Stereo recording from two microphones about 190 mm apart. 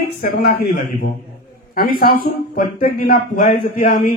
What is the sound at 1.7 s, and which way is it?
A man's voice, 50° left (ahead or behind).